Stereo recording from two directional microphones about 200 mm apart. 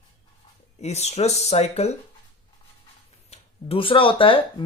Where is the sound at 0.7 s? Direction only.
35° left (ahead or behind).